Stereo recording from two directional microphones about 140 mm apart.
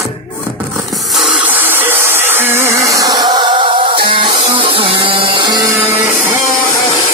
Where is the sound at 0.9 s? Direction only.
Centre (ahead or behind); by 5.6 s 35° right (ahead or behind).